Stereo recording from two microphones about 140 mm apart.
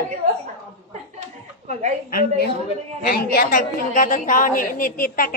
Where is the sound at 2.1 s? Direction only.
90° left.